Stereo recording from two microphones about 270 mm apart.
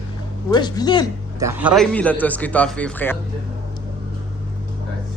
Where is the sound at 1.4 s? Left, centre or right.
Centre.